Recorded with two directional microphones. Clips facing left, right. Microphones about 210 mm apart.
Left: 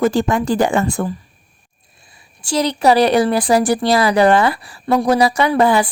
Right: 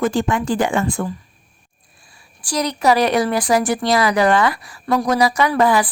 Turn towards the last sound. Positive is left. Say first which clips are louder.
# left 2 dB
turn(degrees=25)  # may be behind; listen again after turning